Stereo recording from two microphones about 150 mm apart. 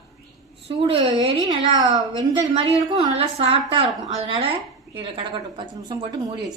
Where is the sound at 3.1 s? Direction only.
40° right (ahead or behind).